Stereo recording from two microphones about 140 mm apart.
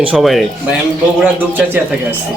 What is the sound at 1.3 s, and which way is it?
Speech, 15° right (ahead or behind).